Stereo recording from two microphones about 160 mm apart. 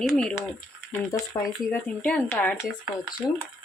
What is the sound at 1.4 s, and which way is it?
Speech, 20° left (ahead or behind).